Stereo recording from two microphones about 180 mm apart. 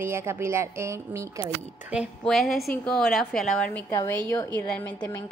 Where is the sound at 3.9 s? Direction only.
15° left (ahead or behind).